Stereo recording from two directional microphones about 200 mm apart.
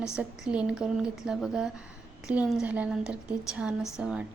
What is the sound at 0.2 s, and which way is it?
A woman's voice, 5° right (ahead or behind).